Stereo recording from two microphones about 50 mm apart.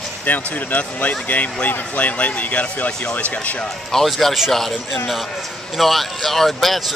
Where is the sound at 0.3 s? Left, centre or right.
Left.